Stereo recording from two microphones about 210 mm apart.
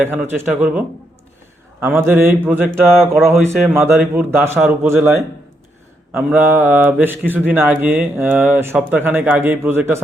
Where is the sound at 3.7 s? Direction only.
10° right (ahead or behind).